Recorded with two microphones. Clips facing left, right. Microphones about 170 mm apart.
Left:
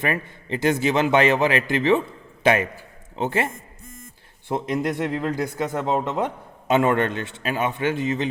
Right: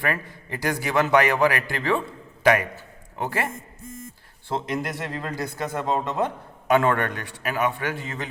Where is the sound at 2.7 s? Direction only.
25° left (ahead or behind).